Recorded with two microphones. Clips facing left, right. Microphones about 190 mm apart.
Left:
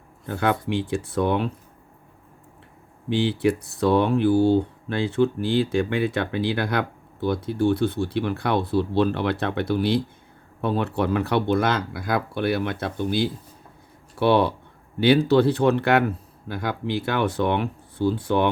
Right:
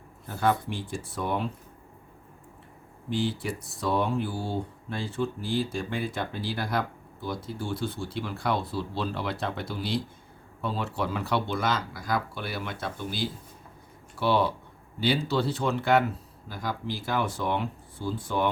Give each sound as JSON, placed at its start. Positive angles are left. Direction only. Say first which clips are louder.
{"t": 0.3, "sound": "speech", "louder": "left 3 dB", "side_deg": 70}
{"t": 3.1, "sound": "speech", "louder": "left 8 dB", "side_deg": 70}